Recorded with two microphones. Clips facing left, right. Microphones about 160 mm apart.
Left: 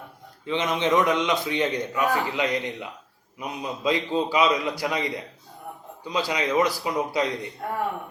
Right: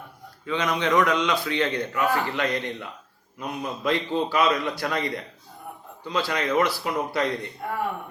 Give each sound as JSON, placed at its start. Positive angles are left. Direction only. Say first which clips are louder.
{"t": 0.4, "sound": "a man's voice", "louder": "left 1 dB", "side_deg": 25}
{"t": 6.1, "sound": "a man's voice", "louder": "even", "side_deg": 15}